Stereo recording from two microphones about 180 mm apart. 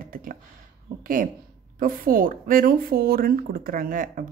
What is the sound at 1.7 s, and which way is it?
Speech, 50° right (ahead or behind).